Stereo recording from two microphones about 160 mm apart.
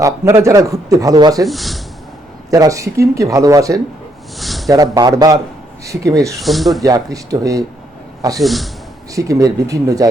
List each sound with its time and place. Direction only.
0.0 s a man's voice: 20° right (ahead or behind)
1.5 s speech: centre (ahead or behind)
2.5 s a man's voice: 20° right (ahead or behind)
4.4 s a sound: centre (ahead or behind)
4.7 s a man's voice: 25° right (ahead or behind)
6.4 s speech: centre (ahead or behind)
6.8 s a man's voice: 20° right (ahead or behind)
8.4 s speech: centre (ahead or behind)
9.1 s a man's voice: 20° right (ahead or behind)